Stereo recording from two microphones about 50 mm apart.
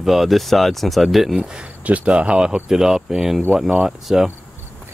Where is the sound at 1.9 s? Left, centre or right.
Right; by 4.2 s centre.